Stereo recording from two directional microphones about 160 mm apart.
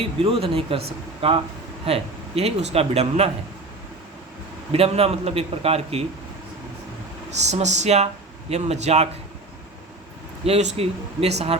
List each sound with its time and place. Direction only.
0.0 s speech: 35° right (ahead or behind)
4.7 s speech: 40° right (ahead or behind)
7.3 s speech: 45° right (ahead or behind)
10.4 s speech: 40° right (ahead or behind)